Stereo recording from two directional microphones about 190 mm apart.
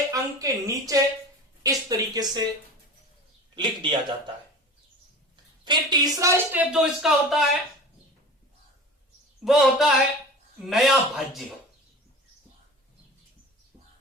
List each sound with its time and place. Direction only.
0.1 s speech: 20° right (ahead or behind)
1.6 s a sound: 20° right (ahead or behind)
3.5 s a man's voice: 25° right (ahead or behind)
5.6 s speech: 20° right (ahead or behind); by 7.4 s centre (ahead or behind)
9.4 s a man's voice: centre (ahead or behind)